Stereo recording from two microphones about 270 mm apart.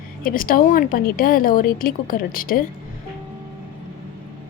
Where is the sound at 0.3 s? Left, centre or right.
Left.